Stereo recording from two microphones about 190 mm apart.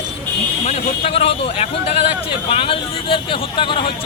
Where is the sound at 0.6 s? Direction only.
35° left (ahead or behind).